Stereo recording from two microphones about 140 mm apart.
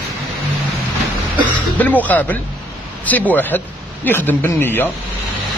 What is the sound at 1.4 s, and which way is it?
Speech, 10° left (ahead or behind).